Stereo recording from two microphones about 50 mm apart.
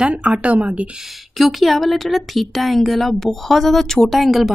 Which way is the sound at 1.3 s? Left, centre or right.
Centre.